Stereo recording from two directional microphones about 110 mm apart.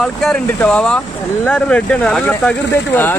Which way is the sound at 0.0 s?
Centre (ahead or behind).